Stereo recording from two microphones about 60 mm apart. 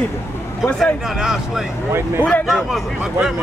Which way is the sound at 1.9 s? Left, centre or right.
Right.